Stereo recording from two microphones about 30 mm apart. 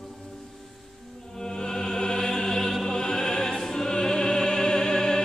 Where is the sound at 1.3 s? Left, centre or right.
Left.